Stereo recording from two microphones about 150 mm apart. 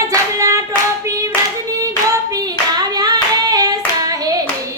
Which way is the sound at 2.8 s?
25° right (ahead or behind).